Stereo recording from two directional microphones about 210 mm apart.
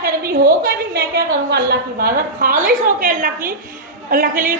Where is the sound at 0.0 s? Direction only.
45° right (ahead or behind).